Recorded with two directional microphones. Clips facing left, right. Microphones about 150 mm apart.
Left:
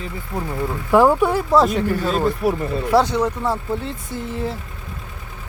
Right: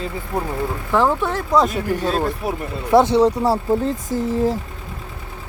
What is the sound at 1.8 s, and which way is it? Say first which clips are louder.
Speech: left 1 dB; 15° right (ahead or behind).